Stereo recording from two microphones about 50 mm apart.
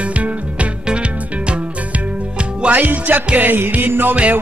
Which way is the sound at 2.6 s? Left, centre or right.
Right.